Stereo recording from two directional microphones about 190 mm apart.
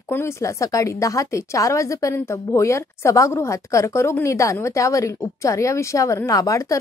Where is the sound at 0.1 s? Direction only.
15° left (ahead or behind).